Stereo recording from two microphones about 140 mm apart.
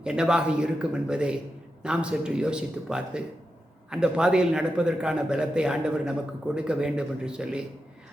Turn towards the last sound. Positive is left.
turn(degrees=-5)  # may be behind; listen again after turning